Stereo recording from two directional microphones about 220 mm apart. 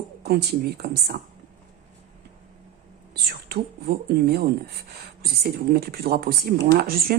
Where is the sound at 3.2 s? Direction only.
45° right (ahead or behind).